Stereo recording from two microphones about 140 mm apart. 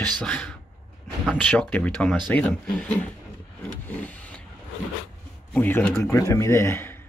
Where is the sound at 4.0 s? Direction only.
10° left (ahead or behind).